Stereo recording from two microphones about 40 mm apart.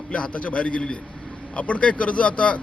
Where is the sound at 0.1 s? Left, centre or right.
Left.